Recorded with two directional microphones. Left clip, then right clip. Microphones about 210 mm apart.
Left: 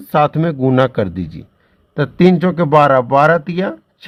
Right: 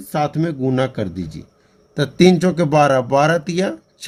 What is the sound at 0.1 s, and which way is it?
Speech, 55° left (ahead or behind).